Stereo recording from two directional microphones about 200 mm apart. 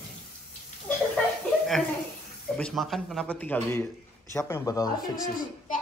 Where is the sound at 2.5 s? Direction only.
Centre (ahead or behind).